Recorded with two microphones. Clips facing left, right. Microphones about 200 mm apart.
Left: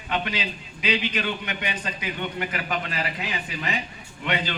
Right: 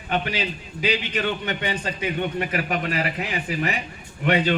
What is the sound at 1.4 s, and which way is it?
Speech, 30° right (ahead or behind).